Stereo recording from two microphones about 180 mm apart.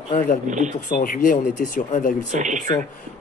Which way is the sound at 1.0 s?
50° left (ahead or behind).